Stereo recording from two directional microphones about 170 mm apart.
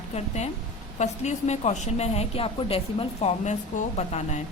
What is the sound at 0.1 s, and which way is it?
A woman's voice, 40° left (ahead or behind).